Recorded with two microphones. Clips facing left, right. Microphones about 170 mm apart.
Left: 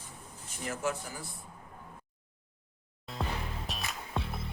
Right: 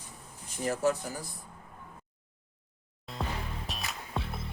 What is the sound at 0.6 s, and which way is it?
Speech, 35° right (ahead or behind).